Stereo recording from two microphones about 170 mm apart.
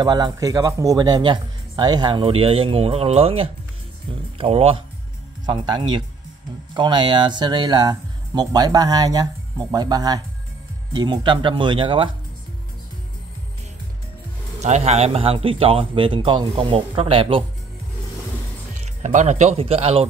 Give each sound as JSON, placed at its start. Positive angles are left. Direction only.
{"t": 0.0, "sound": "speech", "side_deg": -20}
{"t": 14.6, "sound": "speech", "side_deg": -40}
{"t": 18.8, "sound": "speech", "side_deg": -45}